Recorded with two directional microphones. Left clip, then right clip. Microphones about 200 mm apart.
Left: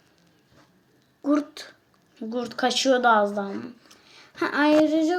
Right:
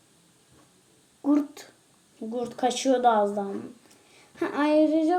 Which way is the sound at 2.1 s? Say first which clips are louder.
Left 2 dB; centre (ahead or behind).